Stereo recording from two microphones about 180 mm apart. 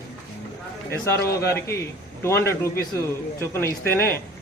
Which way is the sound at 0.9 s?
15° left (ahead or behind).